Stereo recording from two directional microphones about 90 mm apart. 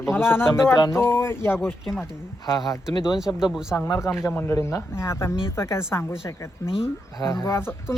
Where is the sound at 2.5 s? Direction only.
45° left (ahead or behind).